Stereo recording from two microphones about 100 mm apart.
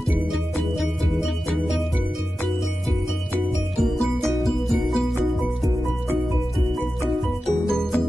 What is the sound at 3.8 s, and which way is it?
Music, centre (ahead or behind).